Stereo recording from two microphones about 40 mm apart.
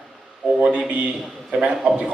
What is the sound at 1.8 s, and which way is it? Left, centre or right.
Speech, right.